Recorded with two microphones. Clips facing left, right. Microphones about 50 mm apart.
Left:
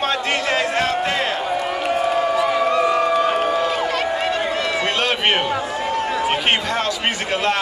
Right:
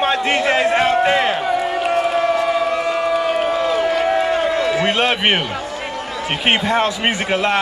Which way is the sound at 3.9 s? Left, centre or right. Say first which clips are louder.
Right 4 dB; left.